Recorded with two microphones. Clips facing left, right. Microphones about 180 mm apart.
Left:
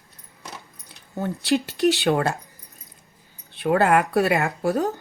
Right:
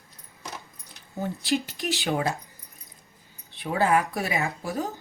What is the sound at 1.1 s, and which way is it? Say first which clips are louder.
Speech: left 4 dB; 65° left (ahead or behind).